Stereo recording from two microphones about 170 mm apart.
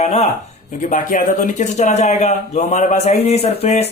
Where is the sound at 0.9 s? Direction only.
50° left (ahead or behind).